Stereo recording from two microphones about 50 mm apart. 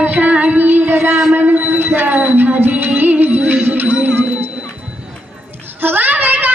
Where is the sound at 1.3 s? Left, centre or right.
Right.